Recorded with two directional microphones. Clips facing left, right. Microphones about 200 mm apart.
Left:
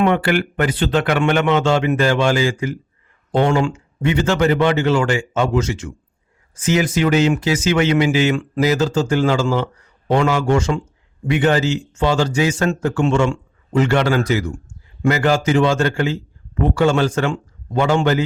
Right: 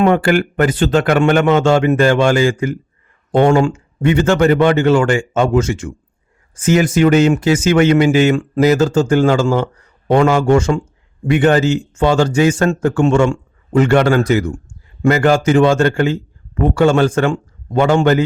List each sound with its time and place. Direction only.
0.0 s speech: 45° right (ahead or behind)